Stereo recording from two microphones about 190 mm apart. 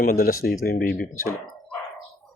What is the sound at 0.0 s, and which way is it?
Speech, 50° left (ahead or behind).